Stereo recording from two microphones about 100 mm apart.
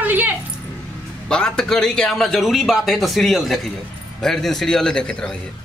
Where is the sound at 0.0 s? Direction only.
20° right (ahead or behind).